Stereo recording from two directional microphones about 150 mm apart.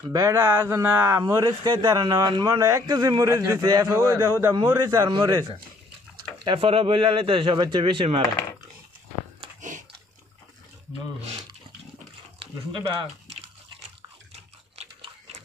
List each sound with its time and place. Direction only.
0.1 s speech: 20° right (ahead or behind)
1.2 s a man's voice: 25° right (ahead or behind)
9.6 s biting: 60° right (ahead or behind)
12.4 s speech: 35° right (ahead or behind)
14.8 s biting: 45° right (ahead or behind)